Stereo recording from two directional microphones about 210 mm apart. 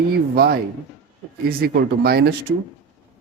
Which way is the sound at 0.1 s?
45° right (ahead or behind).